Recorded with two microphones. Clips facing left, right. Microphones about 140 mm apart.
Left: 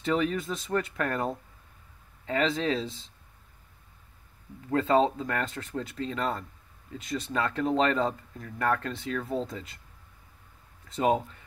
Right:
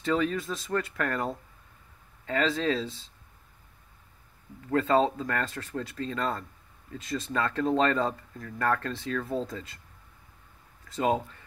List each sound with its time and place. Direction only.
0.0 s speech: 15° left (ahead or behind)
4.6 s speech: 15° left (ahead or behind)
11.0 s speech: 20° left (ahead or behind)